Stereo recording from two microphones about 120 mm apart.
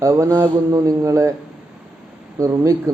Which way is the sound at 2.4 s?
25° right (ahead or behind).